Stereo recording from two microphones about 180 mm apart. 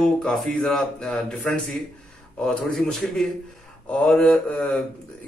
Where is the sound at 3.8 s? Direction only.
5° left (ahead or behind).